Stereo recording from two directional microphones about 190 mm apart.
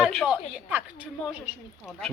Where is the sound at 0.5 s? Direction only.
10° right (ahead or behind).